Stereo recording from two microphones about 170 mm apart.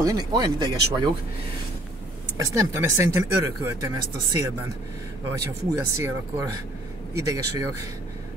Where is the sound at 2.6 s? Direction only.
15° right (ahead or behind).